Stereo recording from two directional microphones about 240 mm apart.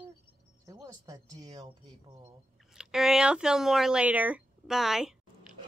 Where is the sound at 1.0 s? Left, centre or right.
Centre.